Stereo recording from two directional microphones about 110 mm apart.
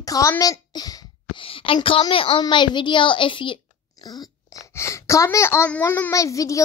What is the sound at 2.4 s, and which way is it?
A child's voice, 45° left (ahead or behind).